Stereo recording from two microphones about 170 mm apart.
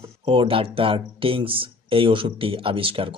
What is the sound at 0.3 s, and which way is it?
Speech, 30° right (ahead or behind).